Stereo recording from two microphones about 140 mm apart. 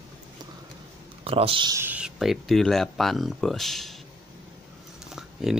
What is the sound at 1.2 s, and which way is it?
Speech, 40° right (ahead or behind).